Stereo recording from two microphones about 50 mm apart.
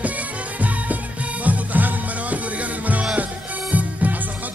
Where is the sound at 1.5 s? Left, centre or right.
Right.